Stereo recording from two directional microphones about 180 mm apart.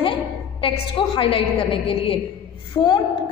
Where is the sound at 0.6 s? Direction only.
30° left (ahead or behind).